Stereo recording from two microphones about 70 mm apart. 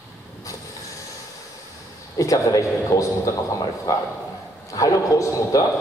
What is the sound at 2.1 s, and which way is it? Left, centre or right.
Speech, left.